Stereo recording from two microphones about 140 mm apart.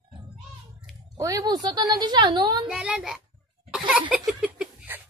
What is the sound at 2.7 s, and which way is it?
Speech, 5° right (ahead or behind).